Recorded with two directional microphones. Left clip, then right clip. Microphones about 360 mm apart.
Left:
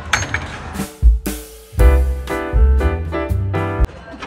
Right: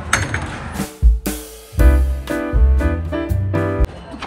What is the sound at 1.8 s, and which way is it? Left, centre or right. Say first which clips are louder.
Music: left 2 dB; centre.